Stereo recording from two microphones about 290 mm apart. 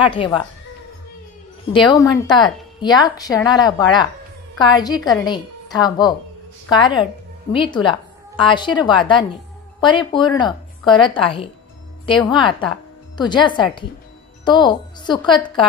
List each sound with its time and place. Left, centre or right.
0.0 s a woman's voice: centre
1.7 s a woman's voice: centre